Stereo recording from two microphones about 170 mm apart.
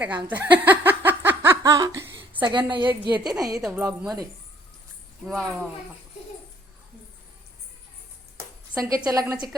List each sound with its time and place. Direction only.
0.3 s laughter: 10° right (ahead or behind)
2.4 s a woman's voice: 25° right (ahead or behind)
3.1 s speech: 5° right (ahead or behind)
3.8 s a woman's voice: 20° right (ahead or behind)
5.2 s speech: centre (ahead or behind)
8.7 s a woman's voice: 20° right (ahead or behind)